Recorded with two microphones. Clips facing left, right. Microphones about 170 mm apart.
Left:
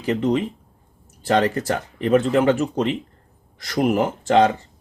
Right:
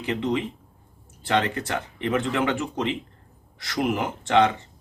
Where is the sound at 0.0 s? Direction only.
40° left (ahead or behind).